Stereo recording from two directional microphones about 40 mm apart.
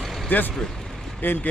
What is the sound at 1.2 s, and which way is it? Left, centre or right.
Speech, left.